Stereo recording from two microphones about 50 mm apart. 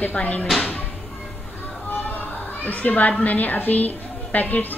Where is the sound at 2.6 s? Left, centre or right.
Left.